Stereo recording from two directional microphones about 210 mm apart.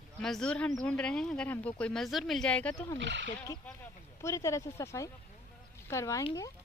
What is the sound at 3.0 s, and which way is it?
Speech, 55° right (ahead or behind).